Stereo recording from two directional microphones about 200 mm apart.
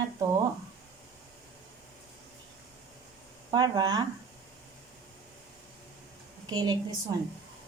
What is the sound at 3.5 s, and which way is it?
Speech, 20° right (ahead or behind).